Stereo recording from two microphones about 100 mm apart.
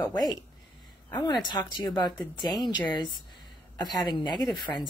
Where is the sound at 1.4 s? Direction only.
45° left (ahead or behind).